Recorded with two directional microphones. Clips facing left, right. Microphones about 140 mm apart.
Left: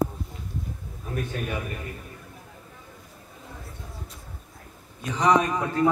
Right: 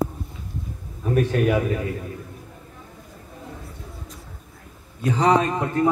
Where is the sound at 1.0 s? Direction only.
80° right.